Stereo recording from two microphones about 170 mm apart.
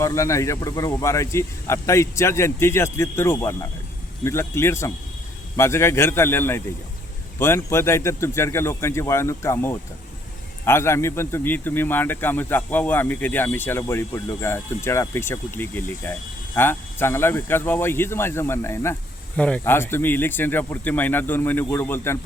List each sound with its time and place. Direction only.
0.0 s speech: 20° left (ahead or behind)